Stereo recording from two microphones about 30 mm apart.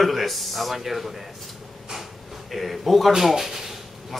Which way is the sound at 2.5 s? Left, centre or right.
Centre.